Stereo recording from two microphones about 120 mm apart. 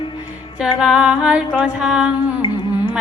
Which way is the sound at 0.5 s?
5° right (ahead or behind).